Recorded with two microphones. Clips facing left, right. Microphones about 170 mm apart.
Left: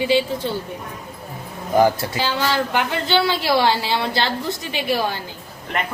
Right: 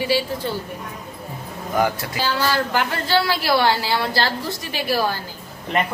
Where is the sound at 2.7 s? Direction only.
20° left (ahead or behind).